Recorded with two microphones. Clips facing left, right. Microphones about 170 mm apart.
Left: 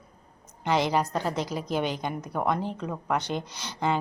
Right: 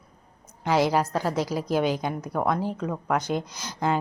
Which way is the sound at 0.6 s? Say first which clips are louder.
Right 3 dB; 10° right (ahead or behind).